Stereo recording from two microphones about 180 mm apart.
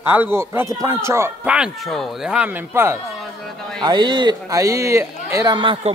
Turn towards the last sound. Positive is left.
turn(degrees=-25)  # may be behind; listen again after turning